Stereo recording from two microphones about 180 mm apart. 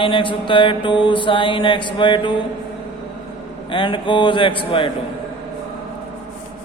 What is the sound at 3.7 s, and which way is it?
A man's voice, 25° left (ahead or behind).